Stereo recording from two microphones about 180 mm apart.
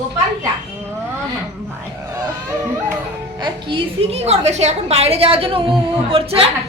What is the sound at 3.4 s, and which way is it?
A woman's voice, 30° right (ahead or behind).